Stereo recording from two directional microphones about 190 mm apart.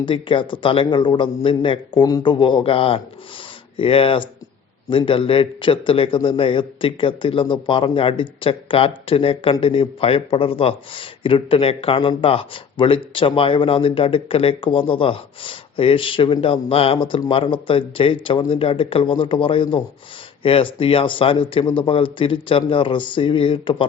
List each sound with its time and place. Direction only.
0.0 s a man's voice: 25° left (ahead or behind)